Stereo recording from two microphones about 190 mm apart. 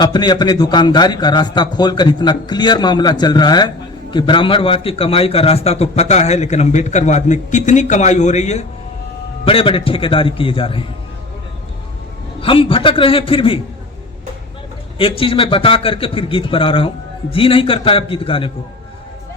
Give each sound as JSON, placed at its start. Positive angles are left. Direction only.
{"t": 0.0, "sound": "a man's voice", "side_deg": 25}
{"t": 12.4, "sound": "a man's voice", "side_deg": 30}
{"t": 14.9, "sound": "a man's voice", "side_deg": 30}